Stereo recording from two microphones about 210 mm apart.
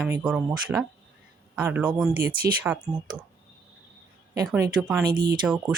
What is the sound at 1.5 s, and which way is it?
Speech, 5° right (ahead or behind).